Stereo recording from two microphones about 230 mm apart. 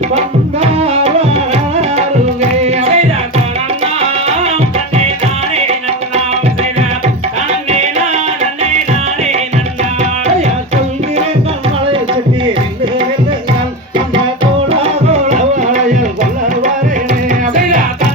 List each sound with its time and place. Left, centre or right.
0.2 s tabla: right
7.7 s music: right
14.7 s tabla: right